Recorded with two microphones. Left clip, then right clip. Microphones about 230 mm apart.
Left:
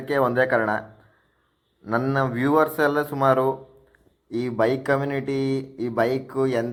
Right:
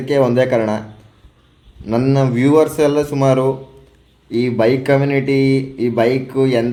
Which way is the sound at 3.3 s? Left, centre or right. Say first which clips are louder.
Right 4 dB; left.